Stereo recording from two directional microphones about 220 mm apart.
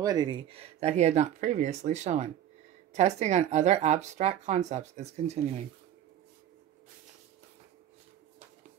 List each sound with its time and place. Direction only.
0.0 s speech: 20° right (ahead or behind)